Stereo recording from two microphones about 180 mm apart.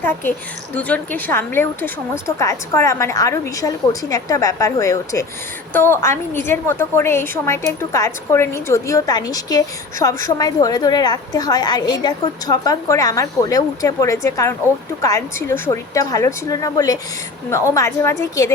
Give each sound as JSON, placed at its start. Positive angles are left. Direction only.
{"t": 0.0, "sound": "a woman's voice", "side_deg": 10}